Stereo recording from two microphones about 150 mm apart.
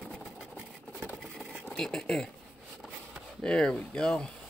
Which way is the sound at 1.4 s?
Centre (ahead or behind).